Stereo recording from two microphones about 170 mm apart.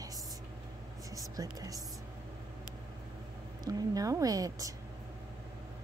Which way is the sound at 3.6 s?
20° right (ahead or behind).